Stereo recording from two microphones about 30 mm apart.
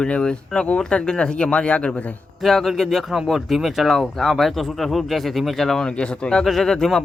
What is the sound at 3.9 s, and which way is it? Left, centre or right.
Speech, centre.